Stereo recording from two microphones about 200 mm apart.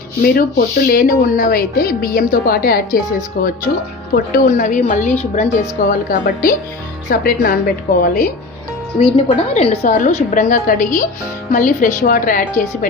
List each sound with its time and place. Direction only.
0.2 s speech: 45° left (ahead or behind)
9.5 s speech: 30° left (ahead or behind)